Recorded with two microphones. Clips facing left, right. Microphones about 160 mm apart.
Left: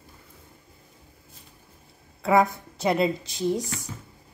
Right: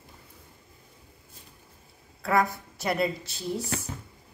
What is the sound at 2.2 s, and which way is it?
Speech, 20° left (ahead or behind).